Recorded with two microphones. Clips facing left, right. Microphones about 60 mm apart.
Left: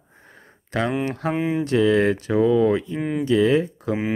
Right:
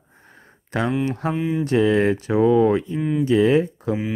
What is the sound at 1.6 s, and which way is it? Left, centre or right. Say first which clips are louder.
Speech: right 1 dB; centre.